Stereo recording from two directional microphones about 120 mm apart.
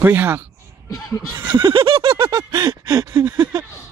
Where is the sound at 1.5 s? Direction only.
45° right (ahead or behind).